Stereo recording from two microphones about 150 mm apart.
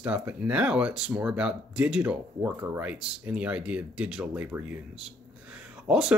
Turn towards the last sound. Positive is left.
turn(degrees=-5)  # may be behind; listen again after turning